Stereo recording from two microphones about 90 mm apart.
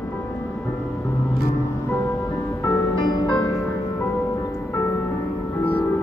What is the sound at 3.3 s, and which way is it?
Music, 45° left (ahead or behind).